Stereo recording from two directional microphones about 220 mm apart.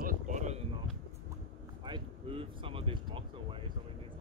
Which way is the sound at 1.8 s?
25° right (ahead or behind).